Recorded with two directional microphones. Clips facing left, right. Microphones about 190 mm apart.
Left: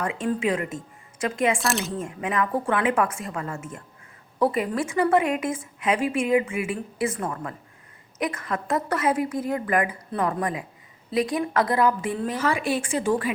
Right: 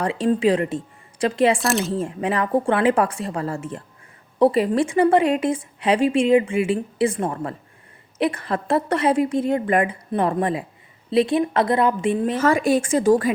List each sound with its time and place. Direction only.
0.0 s a woman's voice: 30° right (ahead or behind)
1.5 s speech: centre (ahead or behind)
1.9 s a woman's voice: 30° right (ahead or behind)
12.4 s a woman's voice: 45° right (ahead or behind)